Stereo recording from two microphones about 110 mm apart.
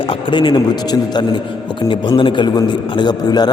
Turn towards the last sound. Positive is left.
turn(degrees=40)  # may be behind; listen again after turning